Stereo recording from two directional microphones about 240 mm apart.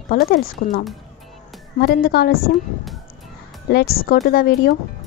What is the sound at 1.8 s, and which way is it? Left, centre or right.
Speech, left.